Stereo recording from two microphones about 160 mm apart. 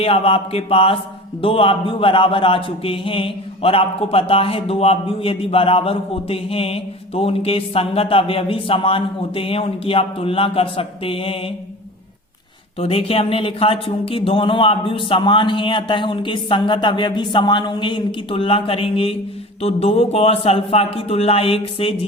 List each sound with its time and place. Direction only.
0.0 s speech: 35° left (ahead or behind)
12.8 s speech: 40° left (ahead or behind)